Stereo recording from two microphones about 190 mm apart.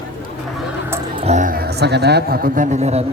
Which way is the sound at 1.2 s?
35° right (ahead or behind).